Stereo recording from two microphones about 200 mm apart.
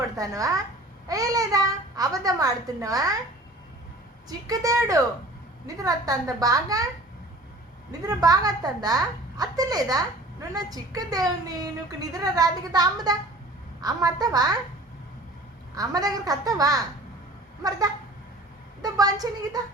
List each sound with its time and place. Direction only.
0.2 s a child's voice: 15° right (ahead or behind)
4.3 s a child's voice: 15° right (ahead or behind)
8.0 s a woman's voice: 20° right (ahead or behind)
15.7 s a child's voice: 15° right (ahead or behind)